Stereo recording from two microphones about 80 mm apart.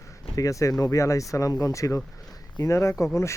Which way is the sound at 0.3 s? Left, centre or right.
Left.